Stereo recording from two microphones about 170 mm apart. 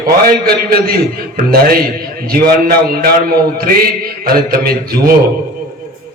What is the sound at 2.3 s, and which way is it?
Speech, 60° right (ahead or behind).